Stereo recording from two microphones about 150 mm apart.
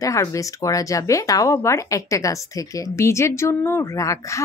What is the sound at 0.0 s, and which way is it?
Speech, 20° left (ahead or behind).